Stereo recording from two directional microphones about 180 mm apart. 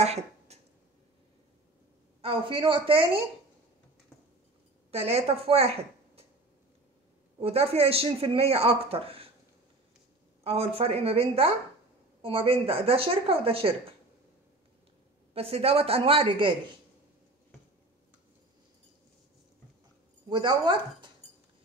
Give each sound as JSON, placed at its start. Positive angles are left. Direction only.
{"t": 0.0, "sound": "a sound", "side_deg": -35}
{"t": 2.2, "sound": "a woman's voice", "side_deg": -30}
{"t": 4.9, "sound": "a woman's voice", "side_deg": -35}
{"t": 7.3, "sound": "speech", "side_deg": -30}
{"t": 10.4, "sound": "speech", "side_deg": -35}
{"t": 15.3, "sound": "speech", "side_deg": -35}
{"t": 20.2, "sound": "a woman's voice", "side_deg": -25}